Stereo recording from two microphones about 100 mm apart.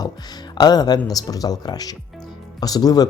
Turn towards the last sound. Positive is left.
turn(degrees=40)  # may be behind; listen again after turning